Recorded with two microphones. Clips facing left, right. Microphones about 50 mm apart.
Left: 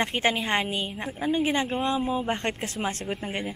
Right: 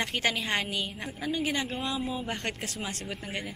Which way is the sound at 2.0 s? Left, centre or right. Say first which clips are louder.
Left 6 dB; centre.